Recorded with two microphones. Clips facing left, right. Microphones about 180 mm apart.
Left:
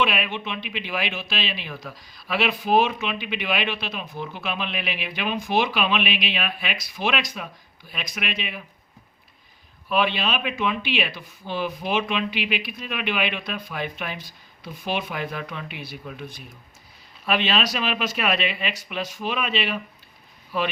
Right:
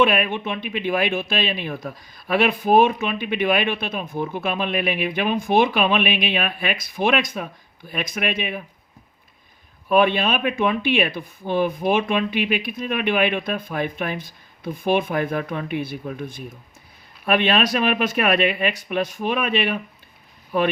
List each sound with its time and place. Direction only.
0.0 s speech: 50° right (ahead or behind)
9.9 s speech: 50° right (ahead or behind)